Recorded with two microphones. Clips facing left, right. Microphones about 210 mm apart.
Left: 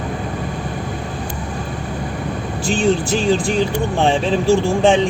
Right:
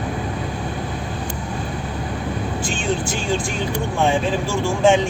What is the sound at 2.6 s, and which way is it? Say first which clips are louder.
Speech: left 9 dB; 35° left (ahead or behind).